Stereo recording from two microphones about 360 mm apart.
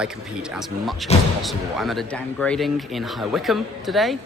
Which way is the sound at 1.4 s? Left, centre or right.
Centre.